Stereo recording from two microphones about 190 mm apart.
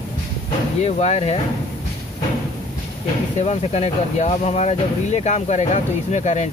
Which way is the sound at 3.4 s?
35° left (ahead or behind).